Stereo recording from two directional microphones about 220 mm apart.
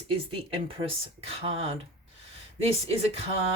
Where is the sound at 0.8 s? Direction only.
25° right (ahead or behind).